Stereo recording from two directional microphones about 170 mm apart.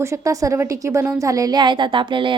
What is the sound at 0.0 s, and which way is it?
A woman's voice, 20° right (ahead or behind).